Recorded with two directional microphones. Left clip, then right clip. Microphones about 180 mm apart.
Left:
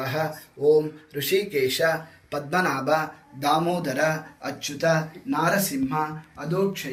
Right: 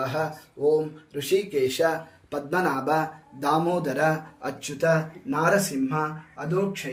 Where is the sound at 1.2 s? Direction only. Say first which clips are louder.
Even; 35° right (ahead or behind).